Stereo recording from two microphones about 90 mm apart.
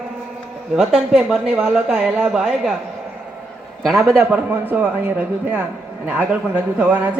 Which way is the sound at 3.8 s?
Centre (ahead or behind).